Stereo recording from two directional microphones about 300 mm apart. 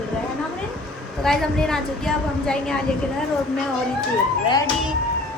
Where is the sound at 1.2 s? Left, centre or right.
Centre.